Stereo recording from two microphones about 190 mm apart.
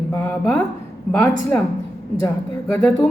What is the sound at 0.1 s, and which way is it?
Speech, 5° left (ahead or behind).